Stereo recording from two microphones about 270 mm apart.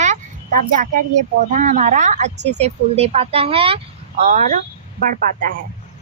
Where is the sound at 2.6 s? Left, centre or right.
Right.